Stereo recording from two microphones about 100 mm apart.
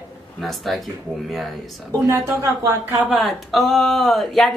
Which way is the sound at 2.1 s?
30° right (ahead or behind).